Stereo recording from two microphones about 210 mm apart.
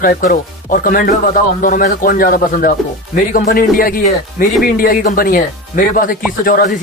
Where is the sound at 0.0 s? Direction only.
40° left (ahead or behind).